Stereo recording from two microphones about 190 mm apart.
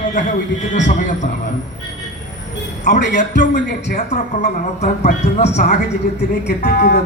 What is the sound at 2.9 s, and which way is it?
Speech, 40° left (ahead or behind).